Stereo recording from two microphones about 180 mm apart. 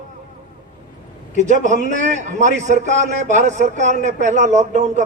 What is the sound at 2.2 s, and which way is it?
A man's voice, 45° right (ahead or behind).